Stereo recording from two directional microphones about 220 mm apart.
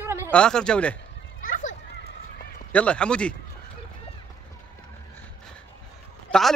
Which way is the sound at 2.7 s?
5° left (ahead or behind).